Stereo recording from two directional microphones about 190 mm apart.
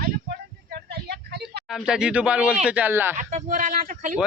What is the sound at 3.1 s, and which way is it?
Speech, 40° right (ahead or behind).